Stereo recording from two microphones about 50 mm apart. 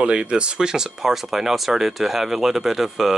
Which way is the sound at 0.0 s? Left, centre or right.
Right.